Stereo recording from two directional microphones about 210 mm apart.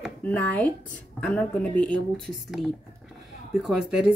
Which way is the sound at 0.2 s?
10° left (ahead or behind).